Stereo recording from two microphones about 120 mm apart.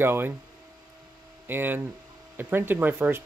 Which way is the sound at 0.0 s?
20° right (ahead or behind).